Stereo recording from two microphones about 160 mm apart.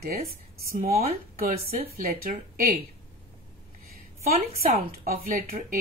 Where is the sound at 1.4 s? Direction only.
70° right (ahead or behind).